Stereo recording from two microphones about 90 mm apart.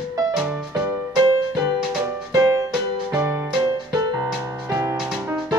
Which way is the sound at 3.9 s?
45° right (ahead or behind).